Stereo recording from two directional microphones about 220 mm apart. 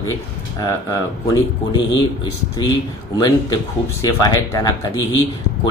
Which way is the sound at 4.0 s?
15° left (ahead or behind).